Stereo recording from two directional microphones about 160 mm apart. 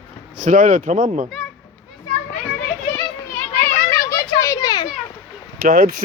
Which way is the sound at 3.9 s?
15° left (ahead or behind).